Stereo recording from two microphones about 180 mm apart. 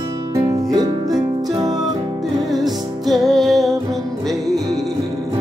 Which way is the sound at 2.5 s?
Centre (ahead or behind).